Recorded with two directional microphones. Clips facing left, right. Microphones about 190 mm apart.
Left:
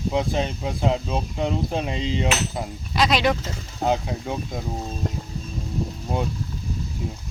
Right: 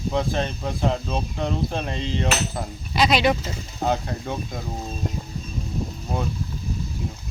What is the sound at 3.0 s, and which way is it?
Speech, 5° right (ahead or behind).